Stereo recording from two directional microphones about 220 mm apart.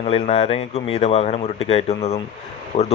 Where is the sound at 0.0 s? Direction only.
25° left (ahead or behind).